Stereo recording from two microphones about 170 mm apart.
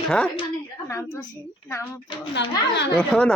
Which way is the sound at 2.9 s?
5° left (ahead or behind).